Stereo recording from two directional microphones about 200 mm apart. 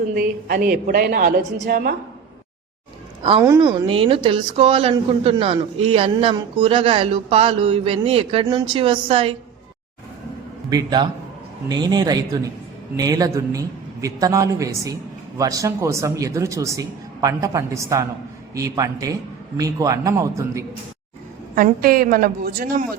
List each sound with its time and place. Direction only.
0.1 s a woman's voice: 50° right (ahead or behind)
3.2 s a woman's voice: 25° right (ahead or behind)
10.7 s a woman's voice: 20° right (ahead or behind)
21.5 s a woman's voice: 45° right (ahead or behind)